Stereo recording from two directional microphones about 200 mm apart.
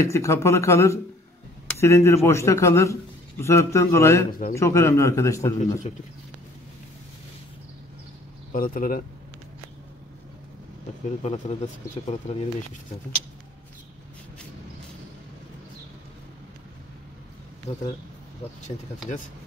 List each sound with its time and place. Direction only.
0.0 s a man's voice: 15° left (ahead or behind)
4.3 s speech: 45° left (ahead or behind)
4.6 s a man's voice: 15° left (ahead or behind)
8.5 s speech: 45° left (ahead or behind)
11.2 s speech: 35° left (ahead or behind)